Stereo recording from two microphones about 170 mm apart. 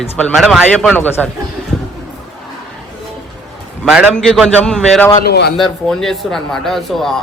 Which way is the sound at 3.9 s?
Centre (ahead or behind).